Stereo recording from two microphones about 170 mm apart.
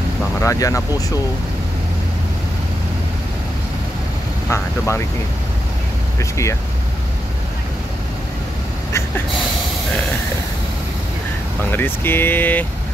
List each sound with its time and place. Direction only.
0.4 s speech: 20° left (ahead or behind)
4.5 s speech: 15° left (ahead or behind)
6.1 s speech: 15° left (ahead or behind)
11.7 s speech: 10° left (ahead or behind)